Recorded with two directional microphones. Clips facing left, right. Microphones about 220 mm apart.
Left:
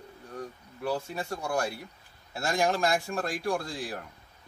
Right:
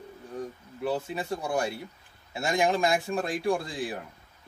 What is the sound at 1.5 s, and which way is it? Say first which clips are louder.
Speech: right 1 dB; 20° right (ahead or behind).